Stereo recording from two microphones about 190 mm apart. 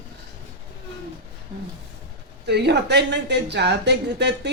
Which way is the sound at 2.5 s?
60° right (ahead or behind).